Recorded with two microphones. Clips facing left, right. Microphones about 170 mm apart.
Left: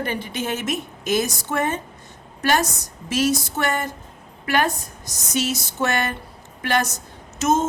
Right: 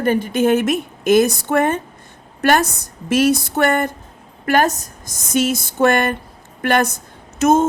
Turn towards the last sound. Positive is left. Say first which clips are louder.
# right 6 dB
turn(degrees=-55)  # may be behind; listen again after turning